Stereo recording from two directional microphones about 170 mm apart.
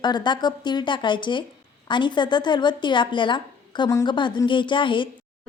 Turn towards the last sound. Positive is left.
turn(degrees=30)  # may be behind; listen again after turning